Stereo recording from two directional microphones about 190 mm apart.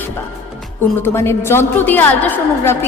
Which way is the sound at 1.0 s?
15° left (ahead or behind).